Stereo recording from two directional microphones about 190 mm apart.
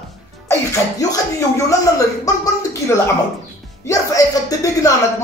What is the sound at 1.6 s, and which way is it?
Speech, 20° left (ahead or behind).